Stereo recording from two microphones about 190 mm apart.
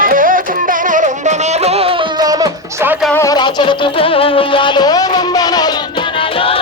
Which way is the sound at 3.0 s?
10° left (ahead or behind).